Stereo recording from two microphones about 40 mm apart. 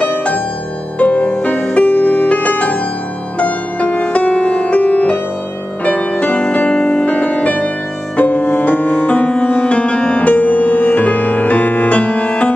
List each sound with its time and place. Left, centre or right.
0.9 s music: left
8.2 s music: left